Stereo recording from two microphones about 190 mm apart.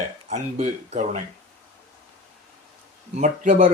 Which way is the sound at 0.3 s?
35° right (ahead or behind).